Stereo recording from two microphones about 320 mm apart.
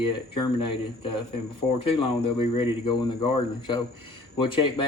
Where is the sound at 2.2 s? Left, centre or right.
Centre.